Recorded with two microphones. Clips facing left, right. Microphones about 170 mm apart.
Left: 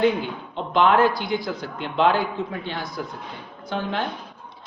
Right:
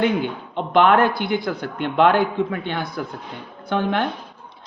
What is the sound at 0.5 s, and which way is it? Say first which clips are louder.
Speech: right 3 dB; 55° right (ahead or behind).